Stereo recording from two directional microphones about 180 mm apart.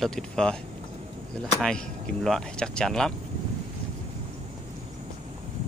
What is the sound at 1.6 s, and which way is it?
Speech, 5° left (ahead or behind).